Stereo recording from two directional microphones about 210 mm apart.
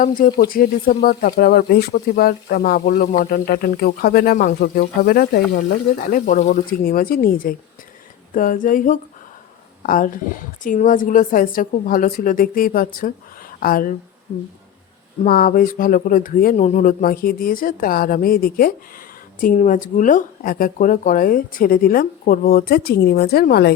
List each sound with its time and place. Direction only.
0.0 s speech: 40° left (ahead or behind)
15.2 s speech: 40° left (ahead or behind)